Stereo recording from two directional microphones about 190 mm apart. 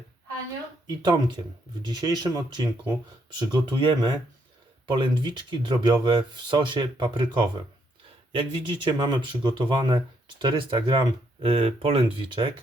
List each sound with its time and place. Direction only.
0.9 s speech: 25° right (ahead or behind)